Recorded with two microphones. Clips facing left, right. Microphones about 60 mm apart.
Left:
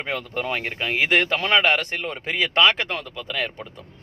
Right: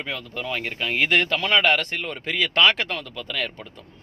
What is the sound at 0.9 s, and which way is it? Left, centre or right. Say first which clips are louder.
Speech: left 1 dB; centre.